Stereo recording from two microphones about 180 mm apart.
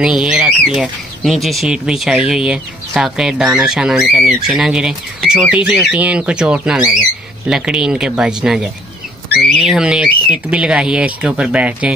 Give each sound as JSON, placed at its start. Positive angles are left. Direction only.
{"t": 0.0, "sound": "speech", "side_deg": -5}